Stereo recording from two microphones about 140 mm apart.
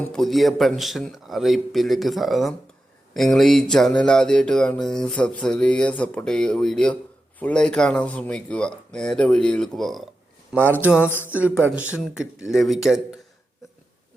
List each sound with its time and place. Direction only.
0.1 s music: centre (ahead or behind)
7.3 s speech: 10° left (ahead or behind)
10.5 s speech: 15° right (ahead or behind)
11.0 s speech: 15° left (ahead or behind)
11.3 s music: 10° right (ahead or behind)